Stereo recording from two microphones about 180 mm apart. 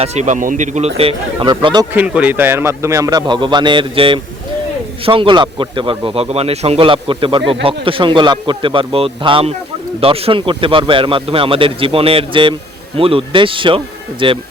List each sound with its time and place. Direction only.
0.0 s speech: 40° right (ahead or behind)
1.9 s speech: 10° right (ahead or behind); by 14.3 s 30° right (ahead or behind)